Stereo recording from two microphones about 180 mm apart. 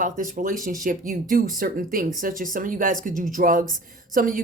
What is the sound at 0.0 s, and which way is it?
Speech, 45° right (ahead or behind).